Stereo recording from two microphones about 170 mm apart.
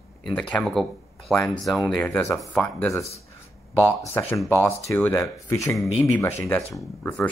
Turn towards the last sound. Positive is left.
turn(degrees=10)  # may be behind; listen again after turning